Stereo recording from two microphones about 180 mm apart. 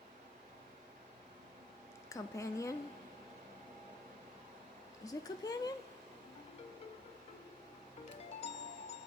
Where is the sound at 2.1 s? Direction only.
15° left (ahead or behind).